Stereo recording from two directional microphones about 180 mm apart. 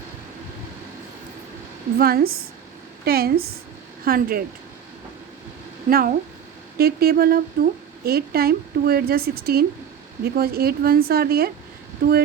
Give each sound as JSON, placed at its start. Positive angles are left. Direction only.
{"t": 2.0, "sound": "speech", "side_deg": -55}
{"t": 5.9, "sound": "speech", "side_deg": -55}